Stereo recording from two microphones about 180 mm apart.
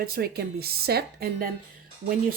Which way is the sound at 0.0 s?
60° right (ahead or behind).